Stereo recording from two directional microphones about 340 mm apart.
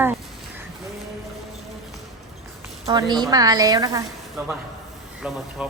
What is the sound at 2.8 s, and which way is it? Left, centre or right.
A woman's voice, centre.